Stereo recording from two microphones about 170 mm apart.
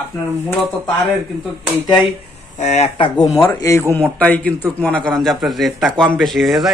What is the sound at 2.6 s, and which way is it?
Speech, 40° left (ahead or behind).